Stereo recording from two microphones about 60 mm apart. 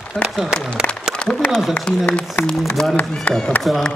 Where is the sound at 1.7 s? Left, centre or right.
Left.